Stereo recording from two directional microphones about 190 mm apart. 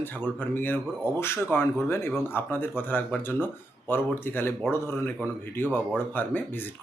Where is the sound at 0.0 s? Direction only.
10° left (ahead or behind).